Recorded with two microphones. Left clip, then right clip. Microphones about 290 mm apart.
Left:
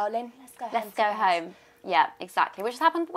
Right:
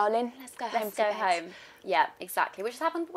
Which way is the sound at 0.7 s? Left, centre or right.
Centre.